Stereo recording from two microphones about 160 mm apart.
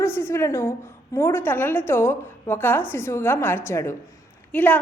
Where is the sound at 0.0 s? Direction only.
15° left (ahead or behind).